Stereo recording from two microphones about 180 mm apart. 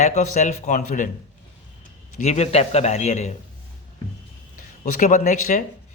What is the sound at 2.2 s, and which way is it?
A man's voice, 35° left (ahead or behind).